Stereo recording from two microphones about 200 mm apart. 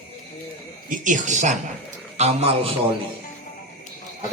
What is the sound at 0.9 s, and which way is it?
Speech, 40° right (ahead or behind).